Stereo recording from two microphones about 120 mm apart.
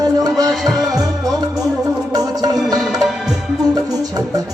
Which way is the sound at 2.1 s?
30° right (ahead or behind).